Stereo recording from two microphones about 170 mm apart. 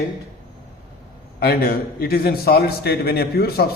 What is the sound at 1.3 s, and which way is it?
A man's voice, 60° left (ahead or behind).